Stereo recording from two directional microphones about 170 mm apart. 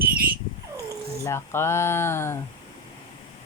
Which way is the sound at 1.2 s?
15° left (ahead or behind).